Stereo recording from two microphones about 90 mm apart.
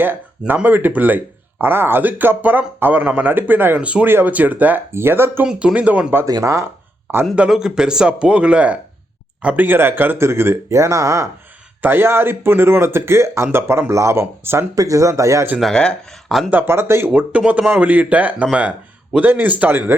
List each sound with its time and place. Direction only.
0.0 s speech: 20° right (ahead or behind)
5.5 s speech: 10° right (ahead or behind)
6.2 s speech: 40° right (ahead or behind)
7.3 s speech: 10° right (ahead or behind); by 11.3 s 40° right (ahead or behind)
11.8 s speech: 25° right (ahead or behind)
15.7 s speech: 10° left (ahead or behind)
16.5 s speech: 25° right (ahead or behind)
17.1 s speech: 15° right (ahead or behind)